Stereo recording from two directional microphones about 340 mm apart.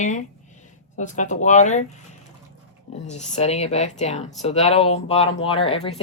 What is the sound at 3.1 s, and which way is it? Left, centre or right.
Speech, centre.